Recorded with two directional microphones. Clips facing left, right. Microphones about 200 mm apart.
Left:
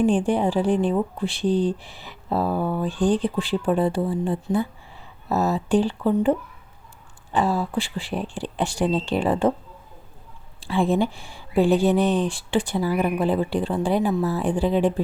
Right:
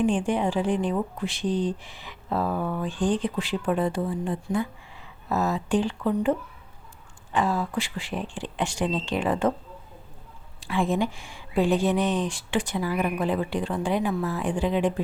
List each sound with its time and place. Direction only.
0.0 s speech: 35° left (ahead or behind)
7.3 s speech: 35° left (ahead or behind)
10.6 s speech: 30° left (ahead or behind)